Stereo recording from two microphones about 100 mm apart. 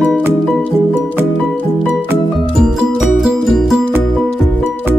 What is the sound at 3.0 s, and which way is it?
Music, 5° right (ahead or behind).